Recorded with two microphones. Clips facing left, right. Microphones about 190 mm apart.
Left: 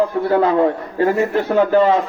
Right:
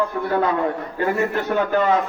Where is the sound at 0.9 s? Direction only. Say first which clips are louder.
Left 5 dB; 30° left (ahead or behind).